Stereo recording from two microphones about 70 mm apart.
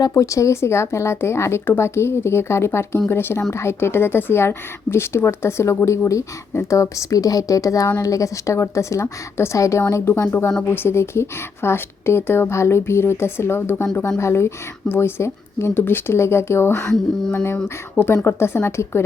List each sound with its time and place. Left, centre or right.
0.1 s a woman's voice: left
16.8 s speech: centre
17.3 s a woman's voice: left